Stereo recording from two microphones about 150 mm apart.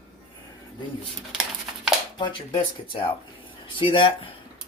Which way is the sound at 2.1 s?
30° left (ahead or behind).